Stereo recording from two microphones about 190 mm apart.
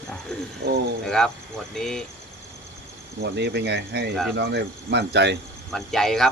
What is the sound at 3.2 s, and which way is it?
Speech, 60° right (ahead or behind).